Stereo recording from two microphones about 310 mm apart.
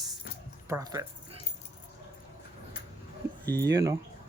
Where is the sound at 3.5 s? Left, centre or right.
Centre.